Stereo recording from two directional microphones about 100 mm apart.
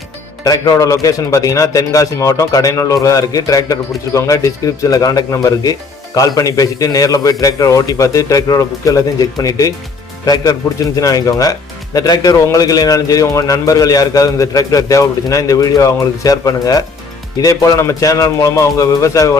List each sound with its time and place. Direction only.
0.4 s a man's voice: 40° left (ahead or behind)